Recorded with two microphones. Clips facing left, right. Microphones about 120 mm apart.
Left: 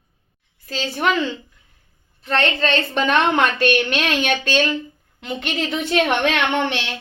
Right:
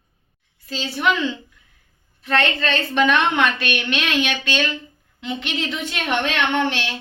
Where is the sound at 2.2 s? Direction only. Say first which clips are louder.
Left 1 dB; 35° left (ahead or behind); by 6.8 s 65° left (ahead or behind).